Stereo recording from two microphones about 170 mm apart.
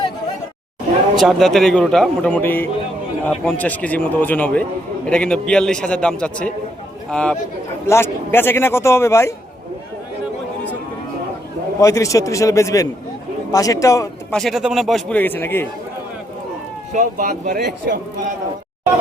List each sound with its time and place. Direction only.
1.2 s a man's voice: centre (ahead or behind); by 9.3 s 15° left (ahead or behind)
11.8 s a man's voice: 20° left (ahead or behind)
14.3 s a man's voice: centre (ahead or behind)
16.9 s speech: 50° right (ahead or behind); by 18.0 s 65° right (ahead or behind)